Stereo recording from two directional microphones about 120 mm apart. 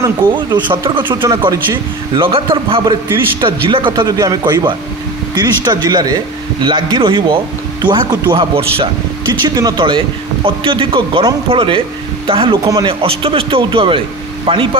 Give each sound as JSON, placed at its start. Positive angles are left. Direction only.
{"t": 0.3, "sound": "speech", "side_deg": -40}
{"t": 2.8, "sound": "speech", "side_deg": -35}
{"t": 3.9, "sound": "speech", "side_deg": -30}
{"t": 9.6, "sound": "speech", "side_deg": -35}